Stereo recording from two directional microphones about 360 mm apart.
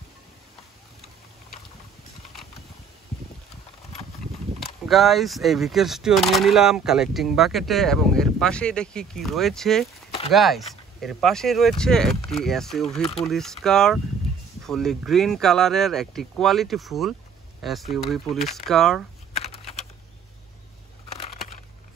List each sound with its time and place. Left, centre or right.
4.6 s speech: centre
19.3 s typing: centre